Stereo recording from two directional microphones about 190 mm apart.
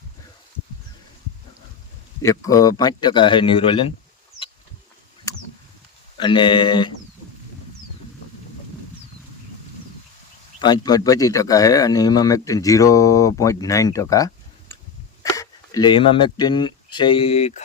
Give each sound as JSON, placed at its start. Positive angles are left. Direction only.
{"t": 2.2, "sound": "speech", "side_deg": 15}
{"t": 6.1, "sound": "speech", "side_deg": 25}
{"t": 10.6, "sound": "speech", "side_deg": 20}